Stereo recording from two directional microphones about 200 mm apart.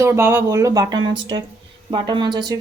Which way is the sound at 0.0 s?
10° right (ahead or behind).